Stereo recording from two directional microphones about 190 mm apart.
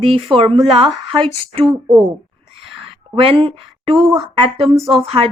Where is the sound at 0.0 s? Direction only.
30° right (ahead or behind).